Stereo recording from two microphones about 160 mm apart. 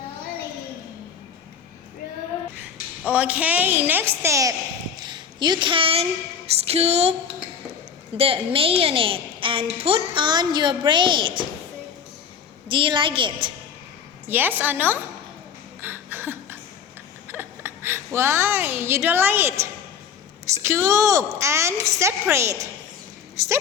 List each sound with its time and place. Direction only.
2.6 s a woman's voice: 10° right (ahead or behind)
4.9 s a sound: 30° right (ahead or behind)
6.6 s a woman's voice: 40° right (ahead or behind)
8.1 s a woman's voice: 35° right (ahead or behind)
12.6 s a woman's voice: 30° right (ahead or behind)
14.3 s a woman's voice: 10° right (ahead or behind)
15.8 s a sound: 15° right (ahead or behind)
17.2 s a woman's voice: 15° right (ahead or behind)